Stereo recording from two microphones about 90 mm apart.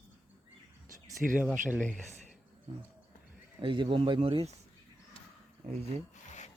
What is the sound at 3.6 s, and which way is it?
Speech, 65° right (ahead or behind).